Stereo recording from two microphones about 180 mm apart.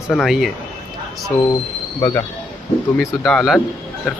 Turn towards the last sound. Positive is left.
turn(degrees=-5)  # may be behind; listen again after turning